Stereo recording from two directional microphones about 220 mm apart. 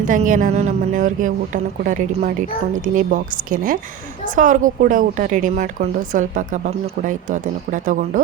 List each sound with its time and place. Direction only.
0.0 s a woman's voice: 35° right (ahead or behind)